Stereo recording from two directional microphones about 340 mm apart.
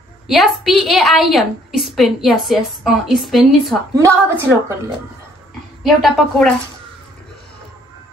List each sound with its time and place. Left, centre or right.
0.3 s a woman's voice: centre